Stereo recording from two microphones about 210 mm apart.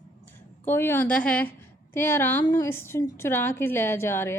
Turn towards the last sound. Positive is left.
turn(degrees=10)  # may be behind; listen again after turning